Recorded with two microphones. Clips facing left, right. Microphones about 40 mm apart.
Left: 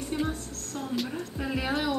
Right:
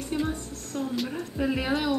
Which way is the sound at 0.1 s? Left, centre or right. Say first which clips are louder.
Right 2 dB; centre.